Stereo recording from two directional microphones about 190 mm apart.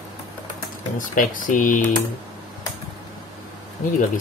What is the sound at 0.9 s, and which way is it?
Speech, 45° left (ahead or behind).